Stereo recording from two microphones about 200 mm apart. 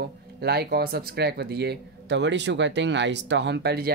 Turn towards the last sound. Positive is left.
turn(degrees=-55)  # may be behind; listen again after turning